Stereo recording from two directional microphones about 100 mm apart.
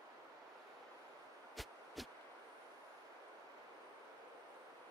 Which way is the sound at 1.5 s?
Centre (ahead or behind).